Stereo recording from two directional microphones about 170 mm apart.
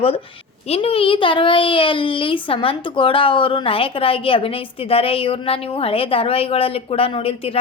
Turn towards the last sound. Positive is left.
turn(degrees=35)  # may be behind; listen again after turning